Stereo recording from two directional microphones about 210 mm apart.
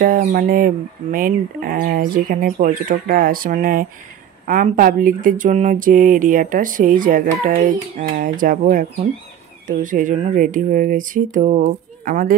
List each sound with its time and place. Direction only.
0.0 s speech: 40° right (ahead or behind)